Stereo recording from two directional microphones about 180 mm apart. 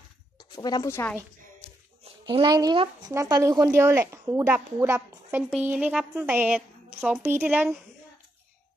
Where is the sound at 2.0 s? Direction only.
25° right (ahead or behind); by 7.7 s 5° right (ahead or behind).